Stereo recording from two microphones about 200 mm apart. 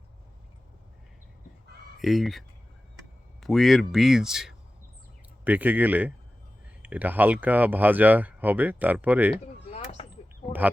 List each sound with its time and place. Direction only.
2.0 s speech: centre (ahead or behind)
3.4 s speech: centre (ahead or behind)
9.4 s a sound: 30° left (ahead or behind)